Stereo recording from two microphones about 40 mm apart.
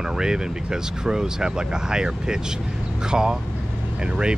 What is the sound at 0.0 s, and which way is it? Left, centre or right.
Speech, centre.